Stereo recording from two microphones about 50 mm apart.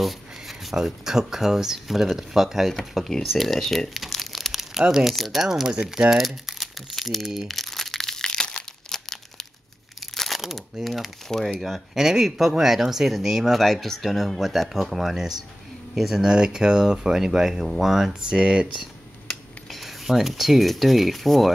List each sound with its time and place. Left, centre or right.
0.0 s speech: centre
3.3 s crumpling: centre
4.8 s speech: centre
5.1 s crumpling: centre
10.1 s speech: centre
13.6 s speech: centre
16.3 s speech: centre
18.3 s speech: right
19.7 s speech: centre